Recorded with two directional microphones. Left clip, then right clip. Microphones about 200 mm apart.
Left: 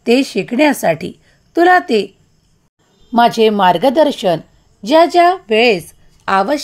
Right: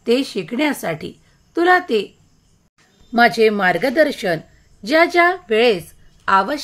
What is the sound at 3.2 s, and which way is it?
A woman's voice, 20° left (ahead or behind).